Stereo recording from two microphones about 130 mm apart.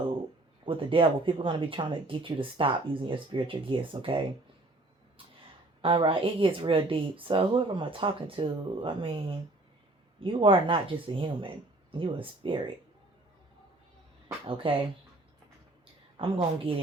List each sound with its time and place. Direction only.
0.6 s speech: 40° right (ahead or behind)
5.8 s speech: 40° right (ahead or behind)
14.4 s a woman's voice: 40° right (ahead or behind)
16.1 s a woman's voice: 45° right (ahead or behind)